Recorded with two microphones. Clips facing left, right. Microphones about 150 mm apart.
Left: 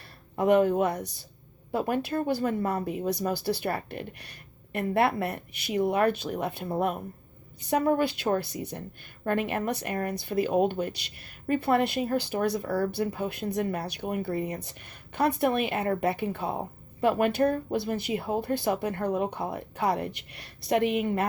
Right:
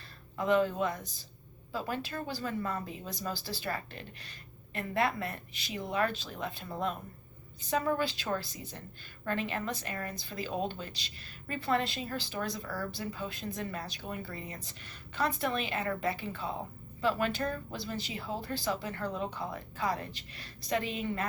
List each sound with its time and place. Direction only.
0.3 s speech: 60° left (ahead or behind)